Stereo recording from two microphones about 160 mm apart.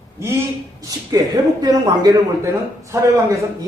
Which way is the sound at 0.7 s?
25° right (ahead or behind).